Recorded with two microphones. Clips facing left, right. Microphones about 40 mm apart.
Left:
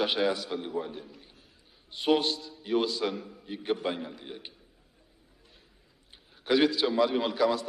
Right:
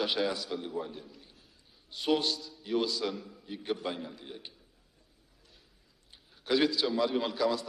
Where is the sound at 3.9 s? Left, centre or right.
Centre.